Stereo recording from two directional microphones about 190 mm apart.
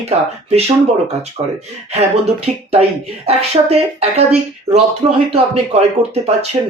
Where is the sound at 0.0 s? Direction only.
35° right (ahead or behind).